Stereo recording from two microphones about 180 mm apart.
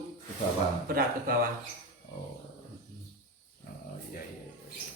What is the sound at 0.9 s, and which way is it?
Speech, 55° right (ahead or behind).